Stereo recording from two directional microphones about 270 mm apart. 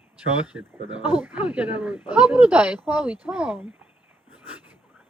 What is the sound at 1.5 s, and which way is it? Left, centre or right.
Speech, centre.